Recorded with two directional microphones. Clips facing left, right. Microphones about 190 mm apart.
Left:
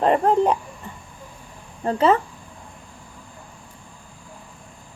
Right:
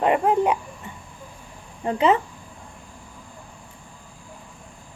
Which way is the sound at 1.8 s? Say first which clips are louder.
Left 1 dB; 15° right (ahead or behind).